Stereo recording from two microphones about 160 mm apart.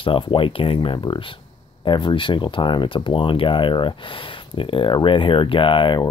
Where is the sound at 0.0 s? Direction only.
35° left (ahead or behind).